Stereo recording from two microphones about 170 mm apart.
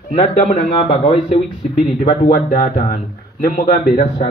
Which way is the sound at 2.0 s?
65° left (ahead or behind).